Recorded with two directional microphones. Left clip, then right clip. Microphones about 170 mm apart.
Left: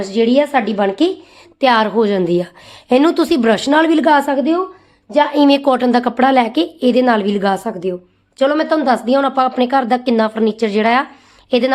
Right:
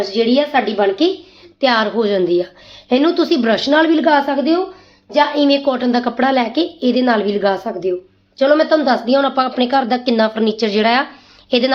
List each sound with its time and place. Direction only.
0.0 s a woman's voice: 80° left
1.6 s a woman's voice: 60° left (ahead or behind)
2.9 s a woman's voice: 75° left (ahead or behind)
5.3 s a woman's voice: 90° left; by 11.0 s 30° left (ahead or behind)